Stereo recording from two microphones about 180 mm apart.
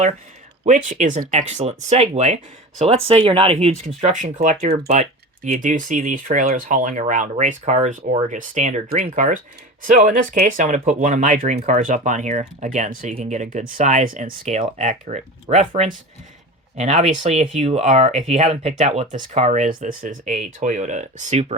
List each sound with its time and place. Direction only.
0.6 s speech: 45° right (ahead or behind)